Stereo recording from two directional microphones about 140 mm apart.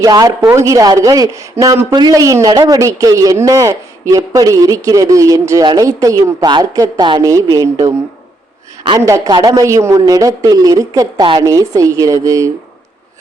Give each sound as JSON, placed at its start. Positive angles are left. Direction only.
{"t": 0.0, "sound": "speech", "side_deg": -25}
{"t": 9.0, "sound": "speech", "side_deg": -25}